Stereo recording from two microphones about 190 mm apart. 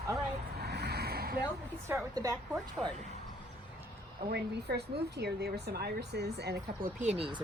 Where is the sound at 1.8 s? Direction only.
15° right (ahead or behind).